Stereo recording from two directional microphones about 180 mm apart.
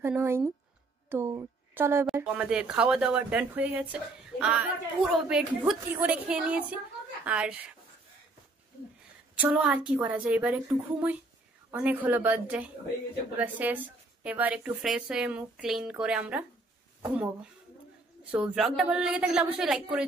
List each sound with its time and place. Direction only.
0.0 s speech: 15° right (ahead or behind)
1.0 s a sound: 10° right (ahead or behind)
1.3 s a woman's voice: 15° right (ahead or behind)
9.4 s speech: 5° right (ahead or behind)